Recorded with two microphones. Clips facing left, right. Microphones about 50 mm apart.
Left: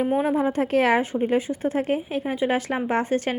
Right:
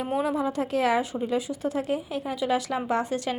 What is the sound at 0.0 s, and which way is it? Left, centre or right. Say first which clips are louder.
A woman's voice: left 5 dB; left.